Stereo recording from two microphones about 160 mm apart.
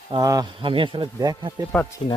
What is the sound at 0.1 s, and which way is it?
Speech, 25° right (ahead or behind).